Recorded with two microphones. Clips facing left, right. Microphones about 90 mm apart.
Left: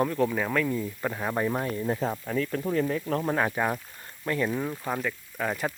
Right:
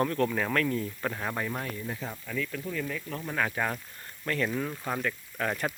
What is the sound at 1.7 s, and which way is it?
Speech, 35° left (ahead or behind).